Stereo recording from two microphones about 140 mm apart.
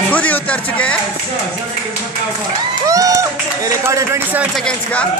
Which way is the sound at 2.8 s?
25° right (ahead or behind).